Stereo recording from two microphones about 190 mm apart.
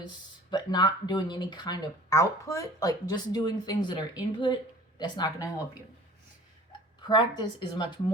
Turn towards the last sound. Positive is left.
turn(degrees=25)  # may be behind; listen again after turning